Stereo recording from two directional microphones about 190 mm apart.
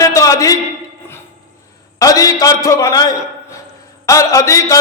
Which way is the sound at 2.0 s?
20° left (ahead or behind).